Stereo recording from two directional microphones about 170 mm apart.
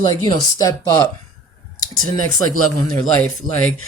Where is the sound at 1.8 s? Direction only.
55° right (ahead or behind).